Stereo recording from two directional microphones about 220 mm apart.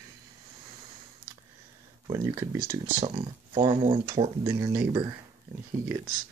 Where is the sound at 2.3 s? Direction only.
15° right (ahead or behind).